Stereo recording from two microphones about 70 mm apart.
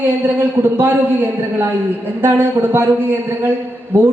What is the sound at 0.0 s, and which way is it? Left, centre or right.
A man's voice, right.